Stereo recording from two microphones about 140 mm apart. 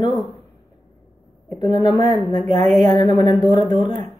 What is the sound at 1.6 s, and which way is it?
Speech, 30° left (ahead or behind).